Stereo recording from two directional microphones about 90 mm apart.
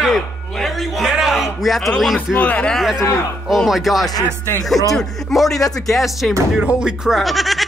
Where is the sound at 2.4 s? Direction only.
15° left (ahead or behind).